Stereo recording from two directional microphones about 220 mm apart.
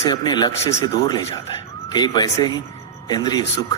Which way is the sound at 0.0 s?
20° left (ahead or behind).